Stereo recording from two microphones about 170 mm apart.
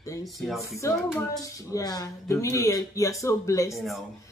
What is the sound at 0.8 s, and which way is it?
Speech, 20° left (ahead or behind).